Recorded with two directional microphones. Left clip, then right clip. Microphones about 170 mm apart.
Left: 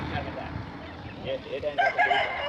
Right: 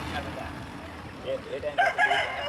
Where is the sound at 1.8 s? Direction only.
50° left (ahead or behind).